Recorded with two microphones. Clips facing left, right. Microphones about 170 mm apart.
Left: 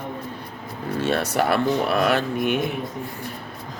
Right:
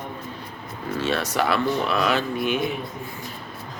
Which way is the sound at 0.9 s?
50° left (ahead or behind).